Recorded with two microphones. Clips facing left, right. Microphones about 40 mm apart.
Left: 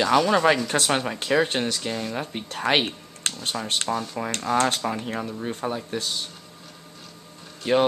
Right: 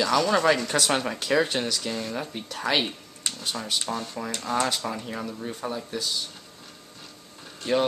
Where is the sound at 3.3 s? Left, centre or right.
Left.